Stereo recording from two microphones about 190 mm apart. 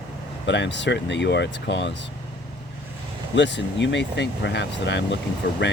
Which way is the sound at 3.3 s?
70° left (ahead or behind).